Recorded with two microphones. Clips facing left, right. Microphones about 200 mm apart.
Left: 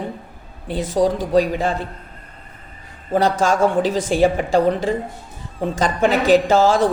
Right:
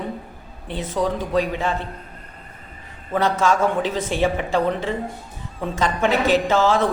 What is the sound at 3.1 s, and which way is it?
A woman's voice, 35° left (ahead or behind).